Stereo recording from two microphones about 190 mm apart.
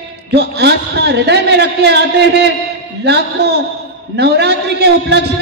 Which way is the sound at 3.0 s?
60° right (ahead or behind).